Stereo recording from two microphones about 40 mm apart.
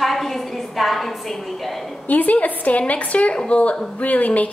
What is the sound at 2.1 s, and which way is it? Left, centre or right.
A woman's voice, left.